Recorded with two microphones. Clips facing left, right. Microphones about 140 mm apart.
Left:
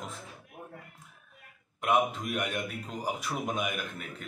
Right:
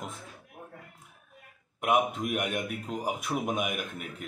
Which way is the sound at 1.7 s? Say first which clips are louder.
Right 1 dB; 10° right (ahead or behind).